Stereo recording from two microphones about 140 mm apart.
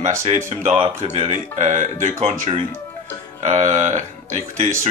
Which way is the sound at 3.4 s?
60° right (ahead or behind).